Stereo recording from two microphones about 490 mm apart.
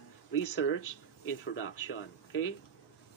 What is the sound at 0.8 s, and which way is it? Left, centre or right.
Speech, left.